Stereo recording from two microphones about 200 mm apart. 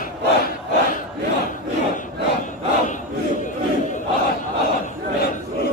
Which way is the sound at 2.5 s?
40° left (ahead or behind).